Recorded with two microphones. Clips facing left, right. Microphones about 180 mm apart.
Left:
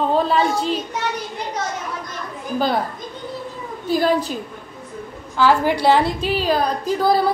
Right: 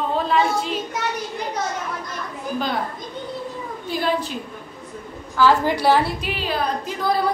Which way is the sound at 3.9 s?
40° left (ahead or behind).